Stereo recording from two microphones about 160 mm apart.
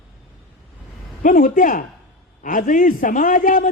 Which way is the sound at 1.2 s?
55° left (ahead or behind).